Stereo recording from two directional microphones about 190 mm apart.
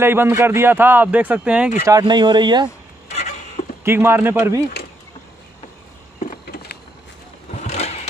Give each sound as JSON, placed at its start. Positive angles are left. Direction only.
{"t": 0.0, "sound": "speech", "side_deg": -10}
{"t": 1.9, "sound": "speech", "side_deg": -20}
{"t": 3.8, "sound": "speech", "side_deg": -10}
{"t": 6.1, "sound": "a sound", "side_deg": 40}
{"t": 7.5, "sound": "vehicle", "side_deg": 35}